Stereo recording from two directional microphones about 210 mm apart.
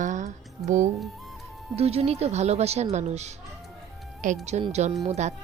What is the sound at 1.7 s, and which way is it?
Speech, 30° right (ahead or behind).